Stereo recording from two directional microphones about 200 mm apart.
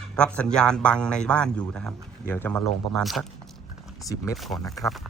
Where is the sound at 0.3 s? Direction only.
5° left (ahead or behind).